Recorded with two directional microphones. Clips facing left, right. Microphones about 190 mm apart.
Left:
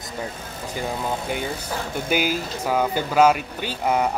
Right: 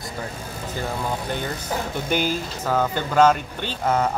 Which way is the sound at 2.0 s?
10° left (ahead or behind).